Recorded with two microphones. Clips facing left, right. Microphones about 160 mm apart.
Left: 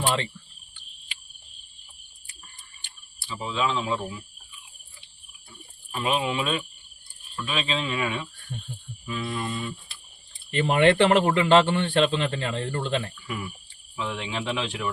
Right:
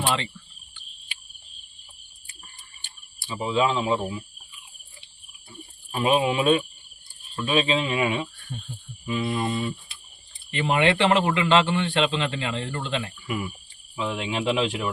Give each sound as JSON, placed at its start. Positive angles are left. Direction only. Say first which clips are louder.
{"t": 3.2, "sound": "speech", "louder": "right 4 dB", "side_deg": -20}
{"t": 5.9, "sound": "speech", "louder": "right 4 dB", "side_deg": -20}
{"t": 10.5, "sound": "a man's voice", "louder": "left 2 dB", "side_deg": 45}
{"t": 13.2, "sound": "speech", "louder": "right 4 dB", "side_deg": -20}